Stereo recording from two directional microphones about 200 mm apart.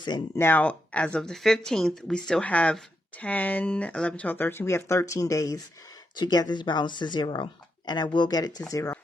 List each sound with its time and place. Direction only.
0.0 s speech: 15° left (ahead or behind)